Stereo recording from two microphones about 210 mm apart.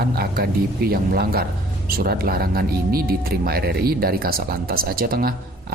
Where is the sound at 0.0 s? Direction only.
45° right (ahead or behind).